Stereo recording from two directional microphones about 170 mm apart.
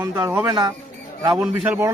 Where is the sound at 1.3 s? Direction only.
5° right (ahead or behind).